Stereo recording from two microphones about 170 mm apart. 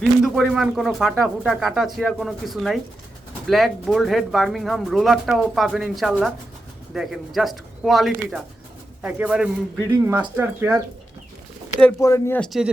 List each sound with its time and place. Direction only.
0.0 s a man's voice: centre (ahead or behind)
11.9 s speech: 15° left (ahead or behind)
12.5 s speech: 5° right (ahead or behind)